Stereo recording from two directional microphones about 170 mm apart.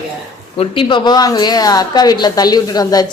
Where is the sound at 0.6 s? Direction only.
30° left (ahead or behind).